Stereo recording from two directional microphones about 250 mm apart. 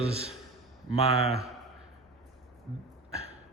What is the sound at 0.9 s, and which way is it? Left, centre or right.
Speech, left.